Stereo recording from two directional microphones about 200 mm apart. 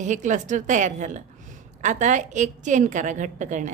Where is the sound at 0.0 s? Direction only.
40° right (ahead or behind).